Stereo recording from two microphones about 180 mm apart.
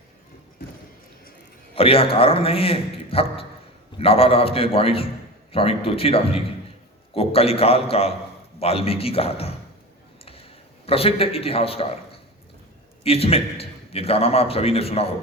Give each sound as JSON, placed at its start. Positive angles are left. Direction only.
{"t": 1.7, "sound": "a man's voice", "side_deg": 30}
{"t": 10.8, "sound": "a man's voice", "side_deg": 30}
{"t": 13.0, "sound": "a man's voice", "side_deg": 35}